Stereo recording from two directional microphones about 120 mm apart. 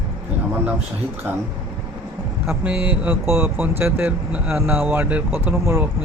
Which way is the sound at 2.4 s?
10° right (ahead or behind).